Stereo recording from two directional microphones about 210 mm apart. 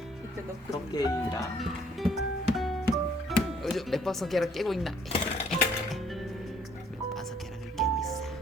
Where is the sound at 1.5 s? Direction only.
Centre (ahead or behind).